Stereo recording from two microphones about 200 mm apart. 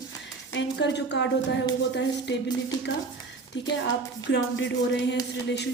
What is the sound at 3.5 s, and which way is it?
A woman's voice, 60° left (ahead or behind).